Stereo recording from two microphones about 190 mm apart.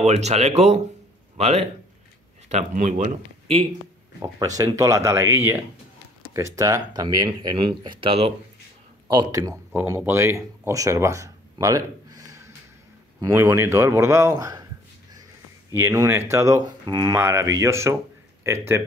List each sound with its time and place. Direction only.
0.0 s speech: 35° right (ahead or behind)
4.6 s a man's voice: 15° right (ahead or behind)
15.7 s speech: 15° right (ahead or behind)